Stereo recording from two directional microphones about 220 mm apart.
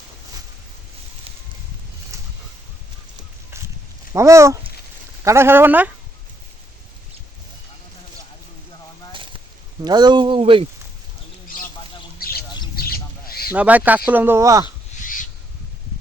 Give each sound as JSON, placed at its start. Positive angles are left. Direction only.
{"t": 4.1, "sound": "speech", "side_deg": -15}
{"t": 9.1, "sound": "a sound", "side_deg": -20}
{"t": 9.8, "sound": "speech", "side_deg": -20}
{"t": 12.2, "sound": "bird", "side_deg": 45}
{"t": 13.5, "sound": "speech", "side_deg": -5}
{"t": 15.0, "sound": "rub", "side_deg": 35}